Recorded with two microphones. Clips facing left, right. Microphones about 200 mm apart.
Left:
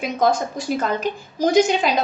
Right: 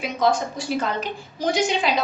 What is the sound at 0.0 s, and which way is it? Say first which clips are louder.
A woman's voice: left 2 dB; 45° left (ahead or behind).